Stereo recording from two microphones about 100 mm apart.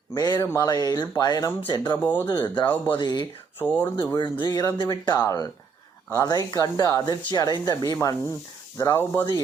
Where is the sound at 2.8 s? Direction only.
50° left (ahead or behind).